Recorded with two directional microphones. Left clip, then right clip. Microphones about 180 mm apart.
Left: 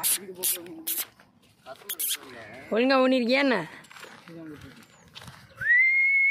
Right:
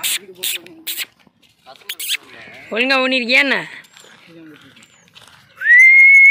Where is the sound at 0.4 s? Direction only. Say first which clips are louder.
Right 10 dB; 10° left (ahead or behind).